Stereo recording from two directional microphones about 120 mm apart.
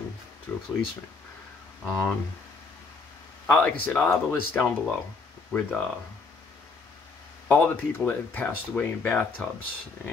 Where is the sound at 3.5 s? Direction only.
15° left (ahead or behind).